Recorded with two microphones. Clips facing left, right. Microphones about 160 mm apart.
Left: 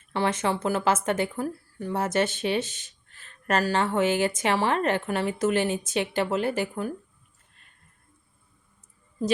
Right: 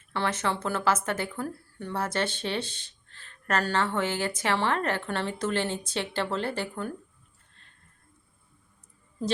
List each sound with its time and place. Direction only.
0.1 s a woman's voice: 15° left (ahead or behind)